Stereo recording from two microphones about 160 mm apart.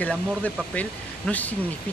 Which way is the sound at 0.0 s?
10° left (ahead or behind).